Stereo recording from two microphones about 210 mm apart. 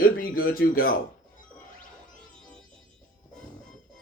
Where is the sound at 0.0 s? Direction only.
45° left (ahead or behind).